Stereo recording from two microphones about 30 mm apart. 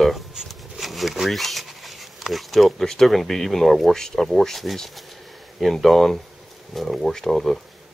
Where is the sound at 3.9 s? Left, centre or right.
Centre.